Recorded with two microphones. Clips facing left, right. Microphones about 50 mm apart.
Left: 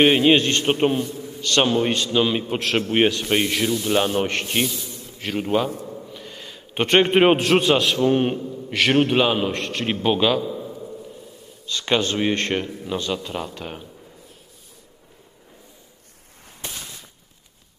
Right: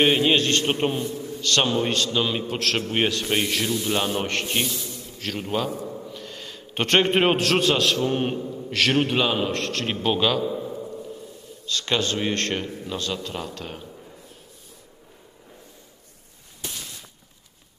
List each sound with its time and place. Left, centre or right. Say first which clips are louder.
0.0 s a man's voice: left 4 dB; centre
3.2 s a man's voice: left 3 dB; centre
5.1 s a man's voice: left 5 dB; centre
5.8 s a sound: right 1 dB; centre
6.1 s a man's voice: right 1 dB; centre
8.4 s mantra: even; centre
8.7 s a man's voice: left 3 dB; centre
10.4 s a sound: right 2 dB; centre
11.6 s speech: left 3 dB; centre
12.5 s a man's voice: left 4 dB; centre
16.6 s a sound: left 1 dB; left